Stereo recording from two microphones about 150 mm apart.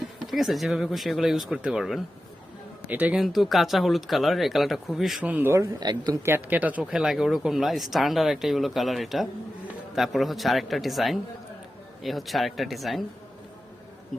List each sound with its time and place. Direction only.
0.3 s speech: centre (ahead or behind)
5.8 s speech: 30° right (ahead or behind)
6.2 s speech: 15° right (ahead or behind)